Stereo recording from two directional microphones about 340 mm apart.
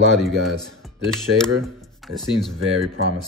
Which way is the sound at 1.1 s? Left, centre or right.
Centre.